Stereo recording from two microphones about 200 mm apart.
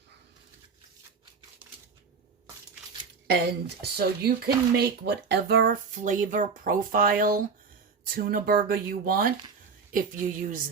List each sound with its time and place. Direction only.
3.2 s speech: 55° right (ahead or behind)